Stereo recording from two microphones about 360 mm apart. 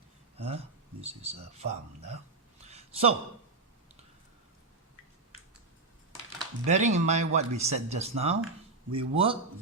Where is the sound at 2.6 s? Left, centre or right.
Centre.